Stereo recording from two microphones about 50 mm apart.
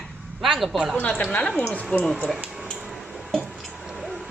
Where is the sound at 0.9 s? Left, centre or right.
Left.